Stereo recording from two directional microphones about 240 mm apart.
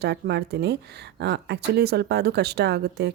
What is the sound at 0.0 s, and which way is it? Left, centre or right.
Speech, right.